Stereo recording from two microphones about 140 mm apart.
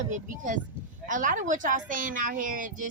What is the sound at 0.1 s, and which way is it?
A woman's voice, 65° right (ahead or behind).